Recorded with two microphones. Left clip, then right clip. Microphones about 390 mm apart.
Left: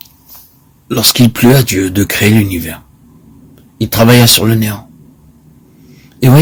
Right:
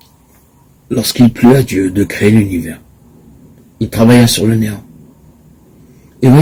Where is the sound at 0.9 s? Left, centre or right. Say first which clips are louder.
Left 2 dB; left.